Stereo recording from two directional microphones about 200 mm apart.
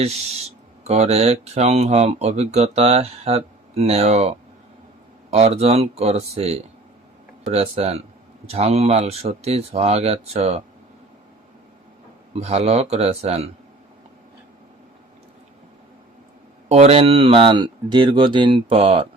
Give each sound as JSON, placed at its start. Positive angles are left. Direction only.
{"t": 0.0, "sound": "speech", "side_deg": -30}
{"t": 12.3, "sound": "speech", "side_deg": -30}
{"t": 16.6, "sound": "speech", "side_deg": -30}